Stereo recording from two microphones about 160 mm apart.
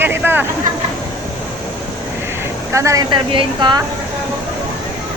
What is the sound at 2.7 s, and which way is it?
Speech, 20° right (ahead or behind).